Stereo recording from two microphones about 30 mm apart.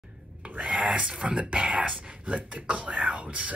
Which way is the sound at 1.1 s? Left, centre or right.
Right.